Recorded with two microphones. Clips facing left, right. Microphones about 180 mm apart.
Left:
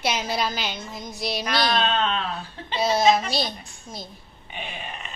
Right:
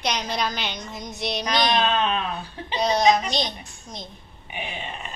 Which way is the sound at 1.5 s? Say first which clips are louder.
Right 2 dB; 15° right (ahead or behind).